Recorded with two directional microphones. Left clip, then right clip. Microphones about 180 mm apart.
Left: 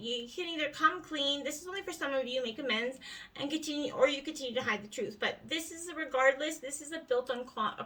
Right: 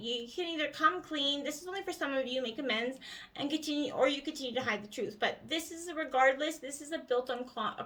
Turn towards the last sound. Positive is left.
turn(degrees=-20)  # may be behind; listen again after turning